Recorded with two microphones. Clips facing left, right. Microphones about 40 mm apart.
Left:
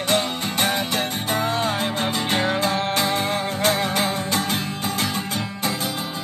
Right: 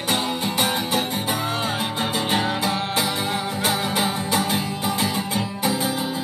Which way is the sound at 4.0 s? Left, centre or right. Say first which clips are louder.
Even; right.